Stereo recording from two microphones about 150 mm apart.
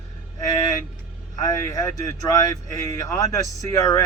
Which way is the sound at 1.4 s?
20° left (ahead or behind).